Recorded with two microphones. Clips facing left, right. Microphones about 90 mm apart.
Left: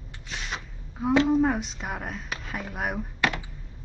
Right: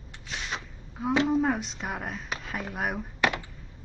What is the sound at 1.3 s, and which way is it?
Speech, centre (ahead or behind).